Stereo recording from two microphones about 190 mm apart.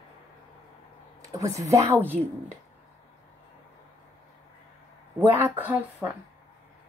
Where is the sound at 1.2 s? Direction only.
15° right (ahead or behind).